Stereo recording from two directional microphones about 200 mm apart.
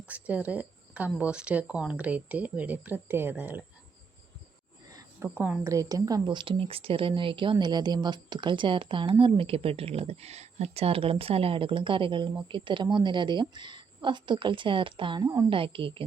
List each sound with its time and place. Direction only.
0.0 s speech: 5° right (ahead or behind)
4.9 s a sound: 20° right (ahead or behind)
5.3 s speech: 5° right (ahead or behind)
5.7 s speech: 15° right (ahead or behind)